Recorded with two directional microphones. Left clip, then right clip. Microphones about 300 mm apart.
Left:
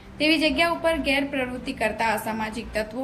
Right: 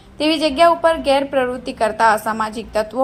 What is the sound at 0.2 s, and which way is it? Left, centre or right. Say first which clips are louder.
Speech: right 6 dB; centre.